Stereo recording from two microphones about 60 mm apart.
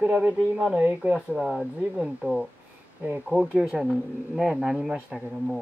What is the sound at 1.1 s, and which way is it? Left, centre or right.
Speech, centre.